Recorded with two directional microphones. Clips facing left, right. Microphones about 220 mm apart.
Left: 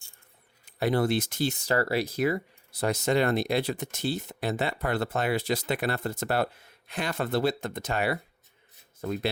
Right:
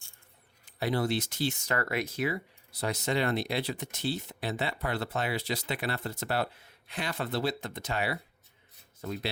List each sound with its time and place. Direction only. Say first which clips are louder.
0.8 s speech: left 4 dB; 50° left (ahead or behind)
1.5 s speech: left 5 dB; 35° left (ahead or behind); by 9.3 s 50° left (ahead or behind)